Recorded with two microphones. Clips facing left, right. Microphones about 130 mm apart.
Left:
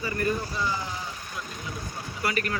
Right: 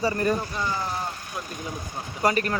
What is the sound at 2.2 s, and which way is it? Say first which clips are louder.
Speech: right 6 dB; 35° right (ahead or behind).